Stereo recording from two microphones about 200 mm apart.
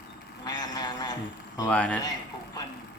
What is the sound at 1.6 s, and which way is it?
Speech, 5° left (ahead or behind).